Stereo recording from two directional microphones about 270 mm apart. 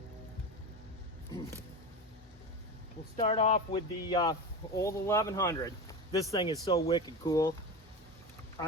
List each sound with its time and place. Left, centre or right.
3.2 s speech: left